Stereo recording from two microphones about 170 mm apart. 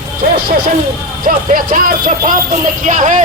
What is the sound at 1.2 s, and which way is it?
Speech, 55° right (ahead or behind).